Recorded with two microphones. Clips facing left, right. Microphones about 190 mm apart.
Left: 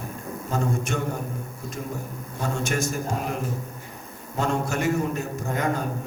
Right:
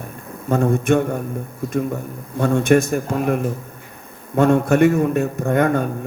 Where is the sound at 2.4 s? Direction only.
60° right (ahead or behind).